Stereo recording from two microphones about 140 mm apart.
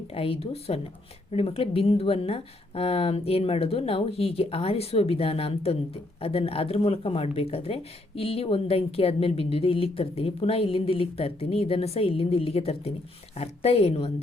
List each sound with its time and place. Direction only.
0.1 s speech: 40° left (ahead or behind)